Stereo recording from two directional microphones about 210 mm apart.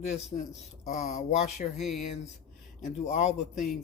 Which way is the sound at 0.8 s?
35° left (ahead or behind).